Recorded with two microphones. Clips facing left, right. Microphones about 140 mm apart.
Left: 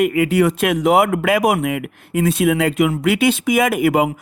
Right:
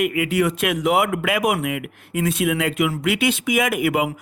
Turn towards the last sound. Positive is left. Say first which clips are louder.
# left 5 dB
turn(degrees=35)  # may be behind; listen again after turning